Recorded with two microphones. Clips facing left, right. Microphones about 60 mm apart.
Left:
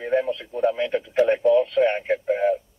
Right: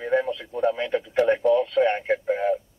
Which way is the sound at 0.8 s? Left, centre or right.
Right.